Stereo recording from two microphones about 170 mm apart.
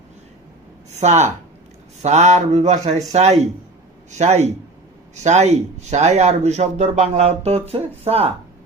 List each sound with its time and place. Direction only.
0.9 s speech: 40° right (ahead or behind)